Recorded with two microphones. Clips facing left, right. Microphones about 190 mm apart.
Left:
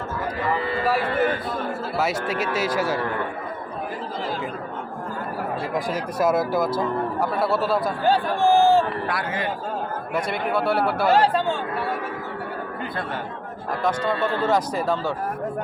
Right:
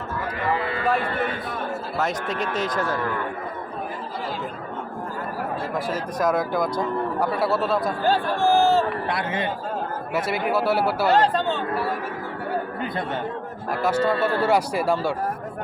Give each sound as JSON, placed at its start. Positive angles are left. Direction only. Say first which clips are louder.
{"t": 0.9, "sound": "speech", "louder": "left 3 dB", "side_deg": 5}
{"t": 5.7, "sound": "speech", "louder": "left 2 dB", "side_deg": 10}
{"t": 8.0, "sound": "speech", "louder": "left 2 dB", "side_deg": 15}
{"t": 9.0, "sound": "a man's voice", "louder": "right 1 dB", "side_deg": -25}
{"t": 10.2, "sound": "speech", "louder": "right 1 dB", "side_deg": -5}
{"t": 11.1, "sound": "speech", "louder": "left 1 dB", "side_deg": 10}
{"t": 13.8, "sound": "speech", "louder": "right 2 dB", "side_deg": -5}